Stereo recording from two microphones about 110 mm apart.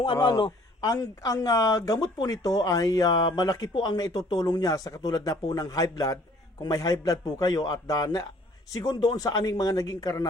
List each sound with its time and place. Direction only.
0.0 s a man's voice: 45° left (ahead or behind)
0.8 s speech: 35° left (ahead or behind)